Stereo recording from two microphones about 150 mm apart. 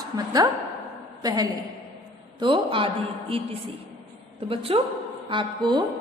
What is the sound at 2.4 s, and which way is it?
A woman's voice, 35° right (ahead or behind).